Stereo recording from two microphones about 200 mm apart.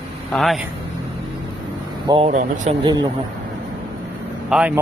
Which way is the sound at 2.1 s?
30° right (ahead or behind).